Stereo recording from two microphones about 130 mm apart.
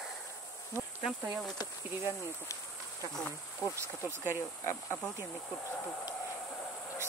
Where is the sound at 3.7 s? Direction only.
20° right (ahead or behind).